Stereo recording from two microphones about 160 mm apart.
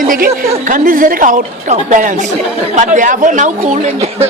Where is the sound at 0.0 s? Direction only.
55° right (ahead or behind).